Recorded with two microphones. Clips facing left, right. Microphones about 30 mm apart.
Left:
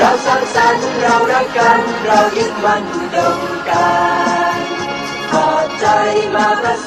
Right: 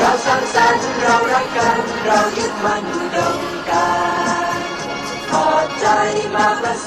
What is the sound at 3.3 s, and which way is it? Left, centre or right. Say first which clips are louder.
Choir: left 3 dB; centre.